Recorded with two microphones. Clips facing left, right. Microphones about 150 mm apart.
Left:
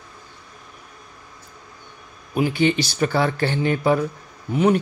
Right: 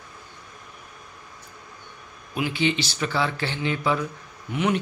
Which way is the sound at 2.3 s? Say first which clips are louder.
Left 5 dB; 45° left (ahead or behind).